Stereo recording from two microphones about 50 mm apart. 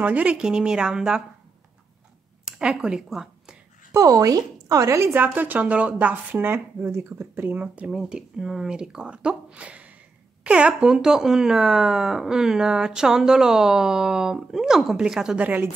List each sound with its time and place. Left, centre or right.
0.0 s speech: right
0.4 s speech: centre
2.4 s speech: centre
4.8 s a woman's voice: right
5.1 s a woman's voice: right
6.4 s a woman's voice: right
7.6 s speech: right
7.9 s a woman's voice: centre
10.8 s speech: centre
15.3 s a woman's voice: right